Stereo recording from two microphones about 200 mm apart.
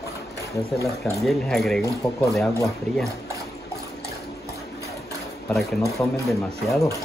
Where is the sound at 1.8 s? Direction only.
15° left (ahead or behind).